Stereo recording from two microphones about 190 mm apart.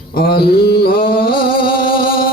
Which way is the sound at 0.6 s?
50° left (ahead or behind).